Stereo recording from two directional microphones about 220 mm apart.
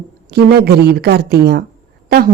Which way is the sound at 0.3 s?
45° right (ahead or behind).